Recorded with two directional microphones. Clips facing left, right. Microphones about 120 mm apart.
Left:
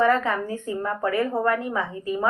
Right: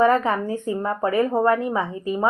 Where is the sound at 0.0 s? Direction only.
20° right (ahead or behind).